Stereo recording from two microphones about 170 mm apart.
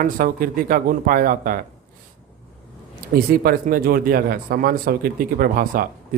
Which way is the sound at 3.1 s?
60° right (ahead or behind).